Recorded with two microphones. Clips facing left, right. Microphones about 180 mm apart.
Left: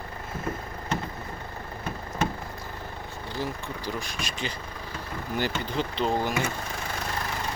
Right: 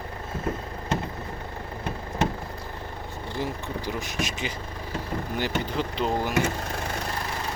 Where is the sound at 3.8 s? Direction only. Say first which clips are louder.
Right 3 dB; 20° right (ahead or behind).